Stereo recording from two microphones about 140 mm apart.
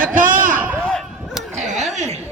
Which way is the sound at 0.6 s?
10° right (ahead or behind).